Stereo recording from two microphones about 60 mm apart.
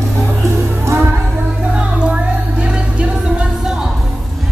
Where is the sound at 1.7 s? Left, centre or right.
Centre.